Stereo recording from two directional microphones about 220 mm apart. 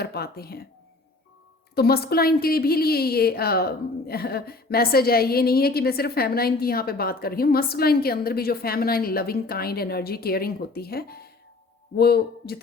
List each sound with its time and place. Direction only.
0.0 s speech: 45° left (ahead or behind)
1.7 s a woman's voice: 45° left (ahead or behind)